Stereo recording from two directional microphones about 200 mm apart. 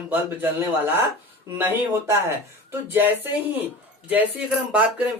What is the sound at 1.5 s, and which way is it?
Speech, 10° right (ahead or behind).